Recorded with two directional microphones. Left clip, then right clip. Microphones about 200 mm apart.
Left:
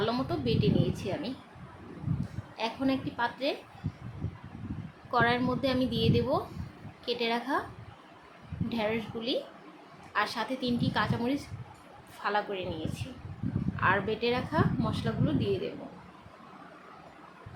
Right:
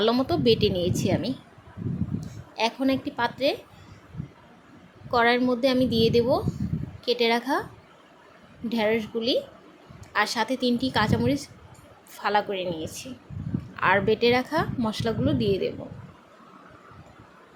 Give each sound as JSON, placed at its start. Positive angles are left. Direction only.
{"t": 0.0, "sound": "a woman's voice", "side_deg": -40}
{"t": 2.6, "sound": "a woman's voice", "side_deg": -40}
{"t": 5.1, "sound": "a woman's voice", "side_deg": -35}
{"t": 8.7, "sound": "a woman's voice", "side_deg": -30}